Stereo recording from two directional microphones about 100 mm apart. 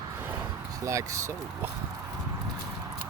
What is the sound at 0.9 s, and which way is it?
Speech, 30° right (ahead or behind).